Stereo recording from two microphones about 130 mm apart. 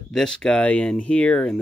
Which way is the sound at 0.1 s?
5° left (ahead or behind).